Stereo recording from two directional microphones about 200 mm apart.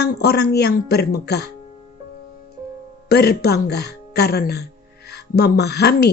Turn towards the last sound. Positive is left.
turn(degrees=55)  # may be behind; listen again after turning